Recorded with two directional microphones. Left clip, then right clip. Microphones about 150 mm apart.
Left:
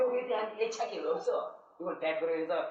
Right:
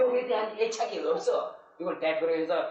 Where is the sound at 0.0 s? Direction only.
30° left (ahead or behind).